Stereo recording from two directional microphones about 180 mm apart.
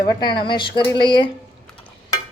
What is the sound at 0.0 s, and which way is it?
Speech, 25° left (ahead or behind).